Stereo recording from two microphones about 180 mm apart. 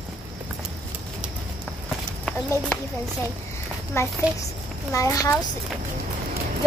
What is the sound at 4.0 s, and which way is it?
Speech, 15° left (ahead or behind).